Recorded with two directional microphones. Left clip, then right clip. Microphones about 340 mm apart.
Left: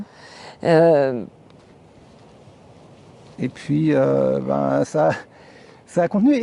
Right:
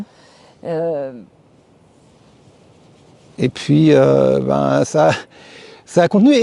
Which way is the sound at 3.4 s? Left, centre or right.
Right.